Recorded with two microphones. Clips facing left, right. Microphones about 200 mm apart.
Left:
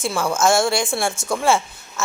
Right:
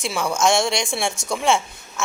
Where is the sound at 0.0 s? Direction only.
Centre (ahead or behind).